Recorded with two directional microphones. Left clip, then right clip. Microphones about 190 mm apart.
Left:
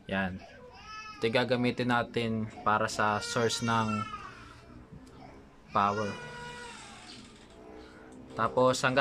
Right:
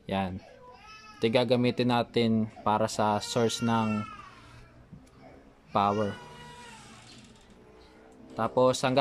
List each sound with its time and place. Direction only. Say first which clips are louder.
0.0 s speech: right 1 dB; 20° right (ahead or behind)
5.7 s speech: right 2 dB; 20° right (ahead or behind)
8.4 s speech: right 1 dB; 15° right (ahead or behind)